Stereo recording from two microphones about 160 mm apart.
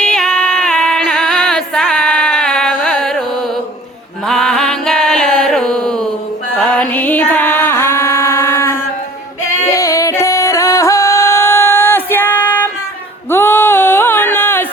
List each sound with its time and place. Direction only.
0.0 s music: 5° left (ahead or behind)
4.3 s music: centre (ahead or behind)
13.3 s a sound: 15° left (ahead or behind)